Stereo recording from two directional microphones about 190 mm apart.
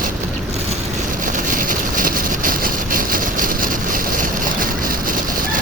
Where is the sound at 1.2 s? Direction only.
45° right (ahead or behind).